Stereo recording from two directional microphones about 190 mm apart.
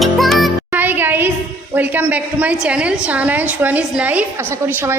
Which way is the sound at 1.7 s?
10° right (ahead or behind).